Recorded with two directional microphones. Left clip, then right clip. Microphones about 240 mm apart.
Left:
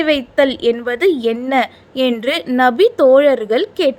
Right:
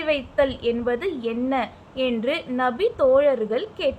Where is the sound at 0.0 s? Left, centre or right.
Left.